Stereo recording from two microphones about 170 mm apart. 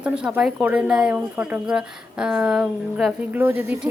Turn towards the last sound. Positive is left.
turn(degrees=-15)  # may be behind; listen again after turning